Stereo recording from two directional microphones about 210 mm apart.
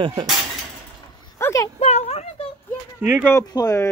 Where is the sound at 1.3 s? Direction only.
15° left (ahead or behind).